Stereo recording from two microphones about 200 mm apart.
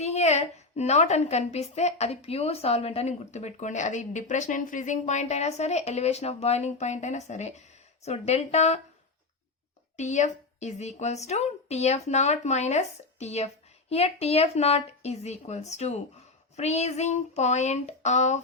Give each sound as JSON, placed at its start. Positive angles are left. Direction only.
{"t": 0.0, "sound": "a woman's voice", "side_deg": 35}
{"t": 10.0, "sound": "a woman's voice", "side_deg": 35}